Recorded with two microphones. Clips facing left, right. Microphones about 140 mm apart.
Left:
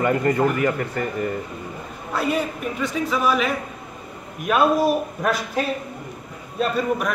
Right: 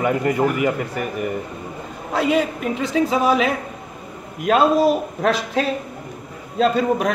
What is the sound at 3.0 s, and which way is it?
Speech, 30° right (ahead or behind).